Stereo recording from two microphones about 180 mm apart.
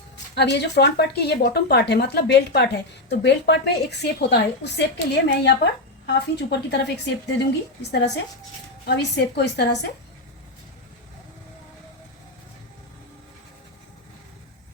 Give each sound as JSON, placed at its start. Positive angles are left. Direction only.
{"t": 0.3, "sound": "speech", "side_deg": 70}